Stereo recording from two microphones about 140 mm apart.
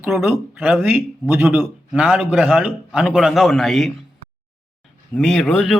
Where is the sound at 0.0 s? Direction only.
Centre (ahead or behind).